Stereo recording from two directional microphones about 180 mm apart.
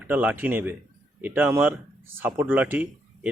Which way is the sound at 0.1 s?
10° right (ahead or behind).